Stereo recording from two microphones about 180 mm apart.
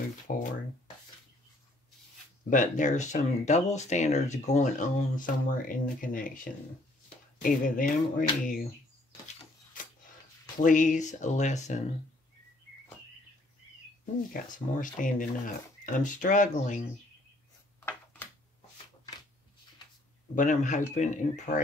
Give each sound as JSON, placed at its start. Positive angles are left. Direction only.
{"t": 0.3, "sound": "speech", "side_deg": 50}
{"t": 2.5, "sound": "speech", "side_deg": 45}
{"t": 10.6, "sound": "speech", "side_deg": 45}
{"t": 14.3, "sound": "speech", "side_deg": 50}
{"t": 20.3, "sound": "speech", "side_deg": 45}